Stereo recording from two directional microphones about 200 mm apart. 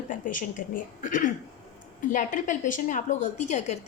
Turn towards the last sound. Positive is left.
turn(degrees=35)  # may be behind; listen again after turning